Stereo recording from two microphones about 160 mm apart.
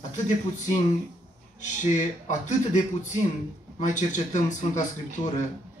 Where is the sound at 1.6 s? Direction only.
50° left (ahead or behind).